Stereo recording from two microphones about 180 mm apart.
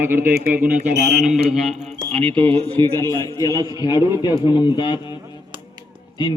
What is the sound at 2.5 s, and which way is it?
Speech, 35° right (ahead or behind).